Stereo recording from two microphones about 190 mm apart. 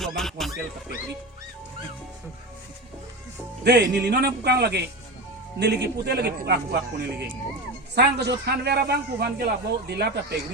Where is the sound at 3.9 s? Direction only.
60° right (ahead or behind).